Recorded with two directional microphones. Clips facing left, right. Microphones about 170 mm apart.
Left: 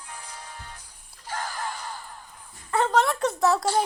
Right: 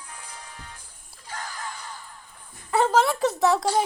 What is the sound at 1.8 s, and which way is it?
Crow, 40° left (ahead or behind).